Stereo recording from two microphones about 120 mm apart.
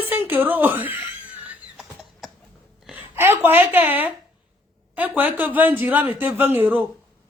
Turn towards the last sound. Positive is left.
turn(degrees=-15)  # may be behind; listen again after turning